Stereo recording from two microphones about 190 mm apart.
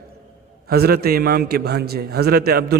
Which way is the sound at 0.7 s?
55° right (ahead or behind).